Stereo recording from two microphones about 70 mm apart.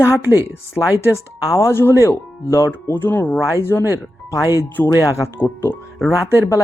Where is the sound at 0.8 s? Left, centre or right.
Left.